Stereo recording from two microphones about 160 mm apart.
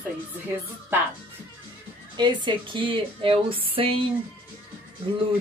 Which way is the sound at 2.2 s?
30° right (ahead or behind).